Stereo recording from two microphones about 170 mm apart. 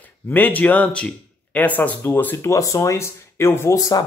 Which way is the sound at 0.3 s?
10° left (ahead or behind).